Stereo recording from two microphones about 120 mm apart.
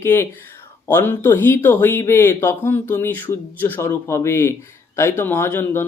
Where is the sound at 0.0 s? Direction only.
20° left (ahead or behind).